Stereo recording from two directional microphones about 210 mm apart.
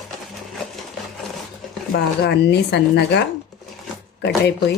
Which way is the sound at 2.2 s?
55° left (ahead or behind).